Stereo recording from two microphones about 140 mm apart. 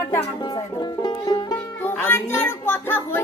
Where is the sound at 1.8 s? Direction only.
15° left (ahead or behind).